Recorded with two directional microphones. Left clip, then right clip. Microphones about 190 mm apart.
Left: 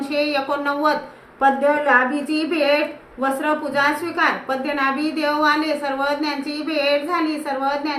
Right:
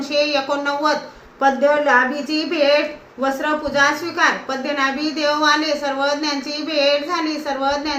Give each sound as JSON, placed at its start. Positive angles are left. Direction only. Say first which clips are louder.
{"t": 0.1, "sound": "a woman's voice", "louder": "right 3 dB", "side_deg": 15}
{"t": 6.7, "sound": "a woman's voice", "louder": "right 2 dB", "side_deg": 15}